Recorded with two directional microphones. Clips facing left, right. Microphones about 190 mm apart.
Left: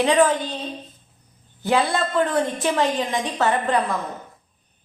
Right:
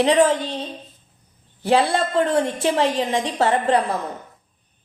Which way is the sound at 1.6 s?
30° right (ahead or behind).